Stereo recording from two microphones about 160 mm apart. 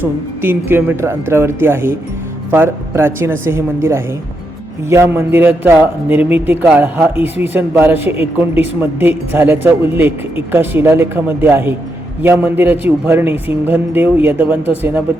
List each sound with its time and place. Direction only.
0.0 s a man's voice: 10° right (ahead or behind)